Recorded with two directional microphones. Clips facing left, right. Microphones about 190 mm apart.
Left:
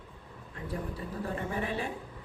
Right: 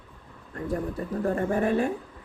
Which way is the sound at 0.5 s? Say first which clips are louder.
Right 8 dB; 50° right (ahead or behind).